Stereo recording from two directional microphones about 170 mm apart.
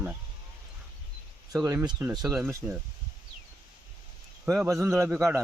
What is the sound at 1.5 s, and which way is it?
A man's voice, 20° right (ahead or behind).